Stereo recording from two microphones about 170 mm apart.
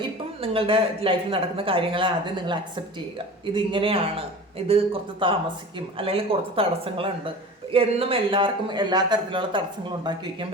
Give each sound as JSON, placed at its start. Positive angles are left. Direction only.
{"t": 0.0, "sound": "a woman's voice", "side_deg": -30}